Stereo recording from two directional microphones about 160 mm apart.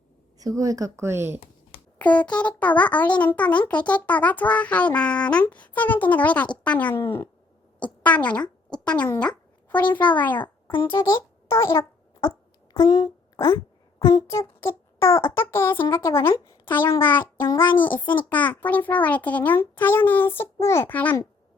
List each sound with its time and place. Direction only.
0.3 s a woman's voice: 20° right (ahead or behind)
2.0 s a child's voice: 10° left (ahead or behind)
12.7 s a sound: 25° left (ahead or behind)
14.0 s a child's voice: 20° left (ahead or behind)